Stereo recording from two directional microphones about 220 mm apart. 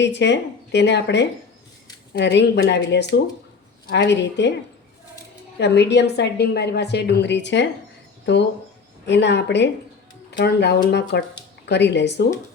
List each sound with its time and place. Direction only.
0.0 s a woman's voice: 55° left (ahead or behind)
5.5 s a woman's voice: 50° left (ahead or behind)
9.0 s a woman's voice: 50° left (ahead or behind)